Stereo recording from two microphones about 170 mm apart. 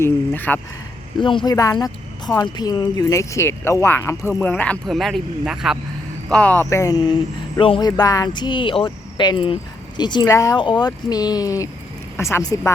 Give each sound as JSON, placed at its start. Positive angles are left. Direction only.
{"t": 0.0, "sound": "speech", "side_deg": 10}
{"t": 1.2, "sound": "speech", "side_deg": 30}